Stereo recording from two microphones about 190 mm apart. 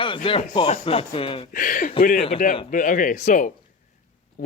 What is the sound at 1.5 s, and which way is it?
Speech, 45° left (ahead or behind).